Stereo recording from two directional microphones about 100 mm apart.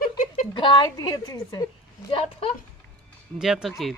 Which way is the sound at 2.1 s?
70° left (ahead or behind).